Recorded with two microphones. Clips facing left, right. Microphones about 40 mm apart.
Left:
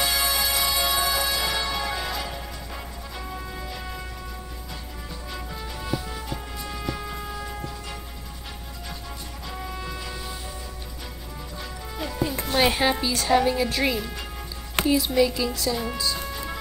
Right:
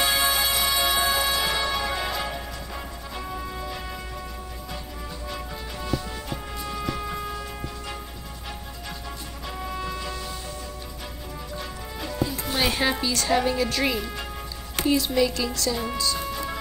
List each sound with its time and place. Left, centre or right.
0.0 s music: right
1.7 s music: centre
5.3 s music: centre
6.6 s vehicle: centre
9.5 s music: centre
11.5 s music: centre
12.7 s a woman's voice: centre